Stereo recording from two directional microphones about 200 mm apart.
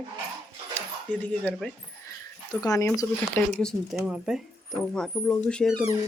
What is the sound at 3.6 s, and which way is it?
Speech, centre (ahead or behind).